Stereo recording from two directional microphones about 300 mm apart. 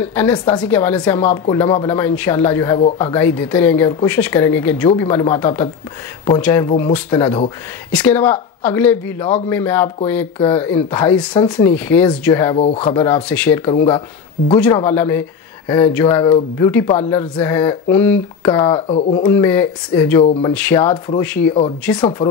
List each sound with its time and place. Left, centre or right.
0.0 s a woman's voice: centre
12.5 s speech: centre
12.9 s speech: centre
14.6 s speech: centre
18.4 s speech: centre